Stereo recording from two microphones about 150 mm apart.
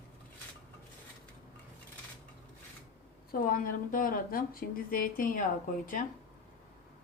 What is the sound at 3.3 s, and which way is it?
Speech, 70° left (ahead or behind).